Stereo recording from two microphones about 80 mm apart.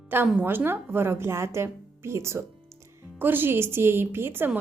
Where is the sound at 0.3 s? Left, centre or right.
Right.